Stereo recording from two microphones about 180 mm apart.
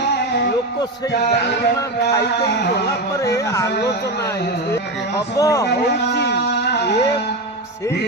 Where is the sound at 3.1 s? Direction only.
15° left (ahead or behind).